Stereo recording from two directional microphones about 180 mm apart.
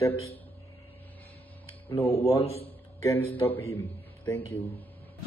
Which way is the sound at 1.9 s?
15° left (ahead or behind).